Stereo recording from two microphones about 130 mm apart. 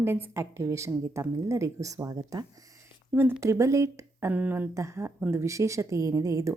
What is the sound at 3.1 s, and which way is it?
A woman's voice, 15° right (ahead or behind).